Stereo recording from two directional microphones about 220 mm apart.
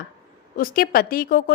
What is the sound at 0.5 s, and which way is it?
A woman's voice, 40° left (ahead or behind).